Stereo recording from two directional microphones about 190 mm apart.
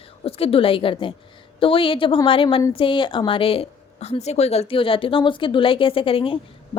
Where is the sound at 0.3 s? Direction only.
30° left (ahead or behind).